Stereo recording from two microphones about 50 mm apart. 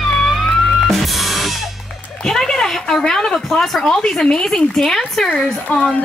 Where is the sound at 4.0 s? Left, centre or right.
Centre.